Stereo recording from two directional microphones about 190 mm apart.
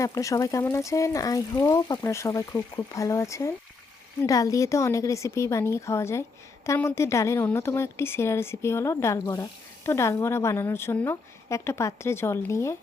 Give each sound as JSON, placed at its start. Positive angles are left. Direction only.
{"t": 0.0, "sound": "speech", "side_deg": 15}